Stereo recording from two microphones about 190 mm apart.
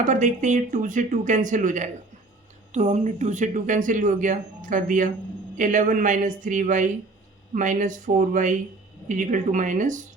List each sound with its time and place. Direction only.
0.0 s speech: 40° right (ahead or behind)